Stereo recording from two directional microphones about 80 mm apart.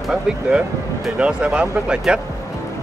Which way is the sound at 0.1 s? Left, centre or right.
Centre.